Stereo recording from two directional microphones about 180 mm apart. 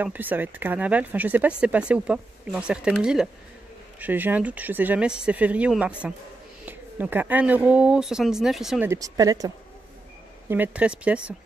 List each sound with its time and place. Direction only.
0.0 s speech: 10° right (ahead or behind)
8.8 s speech: 20° right (ahead or behind)
10.5 s speech: 10° right (ahead or behind)